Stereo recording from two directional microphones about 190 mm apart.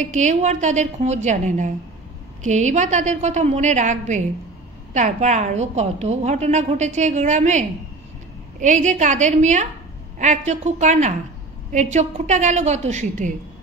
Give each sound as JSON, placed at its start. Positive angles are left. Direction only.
{"t": 0.0, "sound": "a woman's voice", "side_deg": -40}